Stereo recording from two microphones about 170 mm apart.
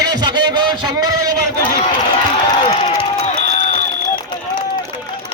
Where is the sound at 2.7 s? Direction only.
35° left (ahead or behind).